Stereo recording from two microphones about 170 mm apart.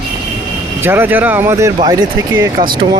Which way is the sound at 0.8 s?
15° right (ahead or behind).